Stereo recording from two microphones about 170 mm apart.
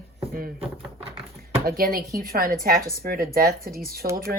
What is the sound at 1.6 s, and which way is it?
Speech, 60° right (ahead or behind).